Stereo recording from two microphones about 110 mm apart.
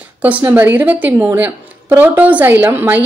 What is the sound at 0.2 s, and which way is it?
A woman's voice, 15° right (ahead or behind).